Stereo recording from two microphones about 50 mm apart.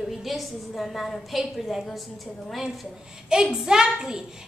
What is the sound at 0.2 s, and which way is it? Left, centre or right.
A woman's voice, centre.